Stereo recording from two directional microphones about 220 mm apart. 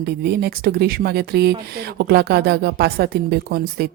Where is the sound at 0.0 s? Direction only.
45° right (ahead or behind).